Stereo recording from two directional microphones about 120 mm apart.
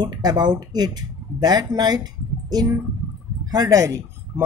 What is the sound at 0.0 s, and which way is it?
Speech, 35° right (ahead or behind).